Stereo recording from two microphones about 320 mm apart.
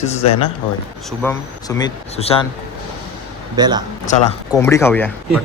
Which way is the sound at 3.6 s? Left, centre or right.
Centre.